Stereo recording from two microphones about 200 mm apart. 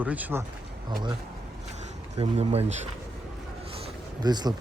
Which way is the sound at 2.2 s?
30° right (ahead or behind).